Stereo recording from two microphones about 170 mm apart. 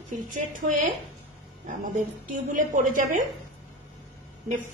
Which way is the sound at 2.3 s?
50° right (ahead or behind).